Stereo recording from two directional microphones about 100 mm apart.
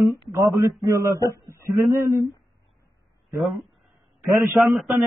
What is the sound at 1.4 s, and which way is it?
Speech, 30° right (ahead or behind).